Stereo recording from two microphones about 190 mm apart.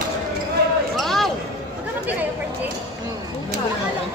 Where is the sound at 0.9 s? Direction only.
Centre (ahead or behind).